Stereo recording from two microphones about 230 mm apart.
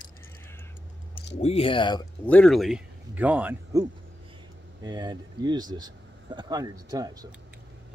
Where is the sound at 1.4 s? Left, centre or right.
Left.